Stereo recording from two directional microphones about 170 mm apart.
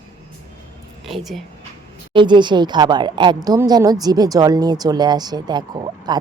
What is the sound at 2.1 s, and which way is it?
Speech, 25° right (ahead or behind).